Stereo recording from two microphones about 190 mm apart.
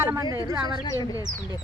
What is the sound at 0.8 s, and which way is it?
Speech, 20° left (ahead or behind).